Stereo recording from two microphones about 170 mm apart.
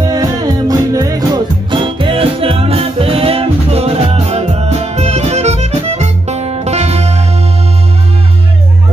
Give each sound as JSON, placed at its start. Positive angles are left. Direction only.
{"t": 0.0, "sound": "music", "side_deg": -20}